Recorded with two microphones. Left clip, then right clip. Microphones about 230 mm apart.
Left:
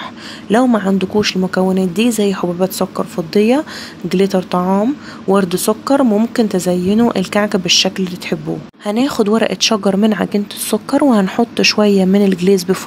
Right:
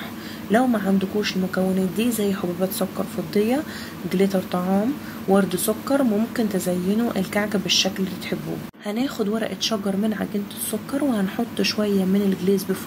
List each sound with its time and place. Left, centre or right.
0.5 s speech: left